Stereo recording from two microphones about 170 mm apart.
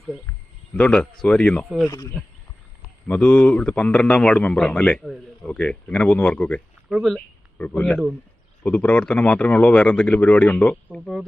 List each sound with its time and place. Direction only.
0.3 s speech: 5° left (ahead or behind)
1.9 s speech: 20° left (ahead or behind)
3.1 s a man's voice: 5° left (ahead or behind)